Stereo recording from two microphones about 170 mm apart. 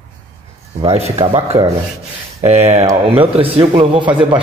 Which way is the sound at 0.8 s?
35° right (ahead or behind).